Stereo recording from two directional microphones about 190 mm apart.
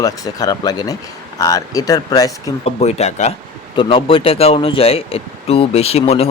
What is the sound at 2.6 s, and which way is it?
Speech, 35° left (ahead or behind).